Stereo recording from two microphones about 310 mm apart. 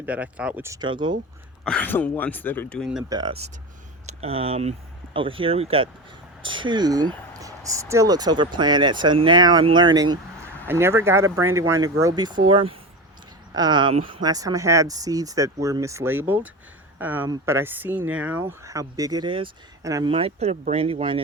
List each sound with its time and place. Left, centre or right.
0.0 s speech: centre
1.6 s speech: centre
3.1 s speech: centre